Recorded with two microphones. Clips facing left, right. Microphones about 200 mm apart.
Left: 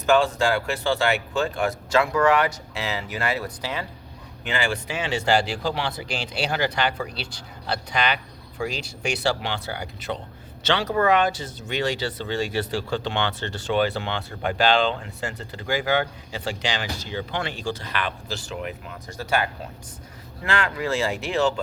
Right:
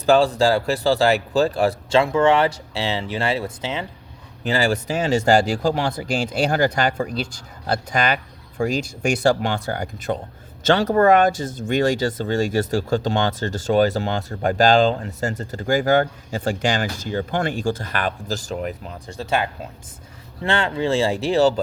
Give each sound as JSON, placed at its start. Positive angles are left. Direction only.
{"t": 0.0, "sound": "speech", "side_deg": -35}
{"t": 4.4, "sound": "speech", "side_deg": -35}